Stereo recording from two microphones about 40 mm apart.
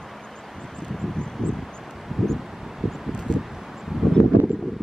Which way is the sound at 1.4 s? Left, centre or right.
Centre.